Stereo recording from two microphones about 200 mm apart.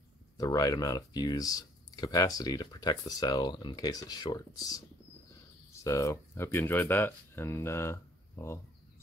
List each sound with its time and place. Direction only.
0.4 s speech: 20° left (ahead or behind)
5.9 s speech: 15° left (ahead or behind)